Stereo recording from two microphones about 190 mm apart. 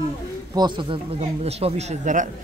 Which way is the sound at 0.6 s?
25° right (ahead or behind).